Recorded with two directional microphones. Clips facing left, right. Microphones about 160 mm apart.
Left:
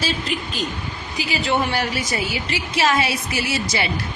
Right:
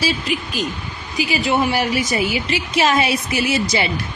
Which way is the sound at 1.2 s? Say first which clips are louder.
Right 3 dB; 15° right (ahead or behind).